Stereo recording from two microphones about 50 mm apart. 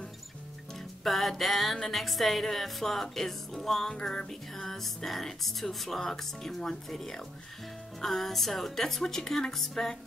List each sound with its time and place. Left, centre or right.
0.7 s music: centre